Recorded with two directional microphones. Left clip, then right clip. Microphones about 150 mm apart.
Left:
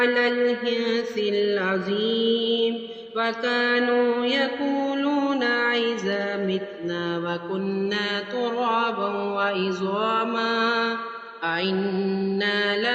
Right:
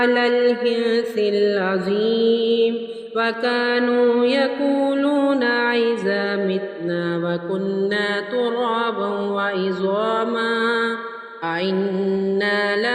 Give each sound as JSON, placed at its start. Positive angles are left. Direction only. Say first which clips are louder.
{"t": 0.0, "sound": "music", "louder": "right 4 dB", "side_deg": -35}
{"t": 7.9, "sound": "mantra", "louder": "right 5 dB", "side_deg": -30}